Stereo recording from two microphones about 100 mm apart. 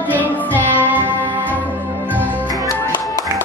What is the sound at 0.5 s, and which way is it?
Music, 20° right (ahead or behind).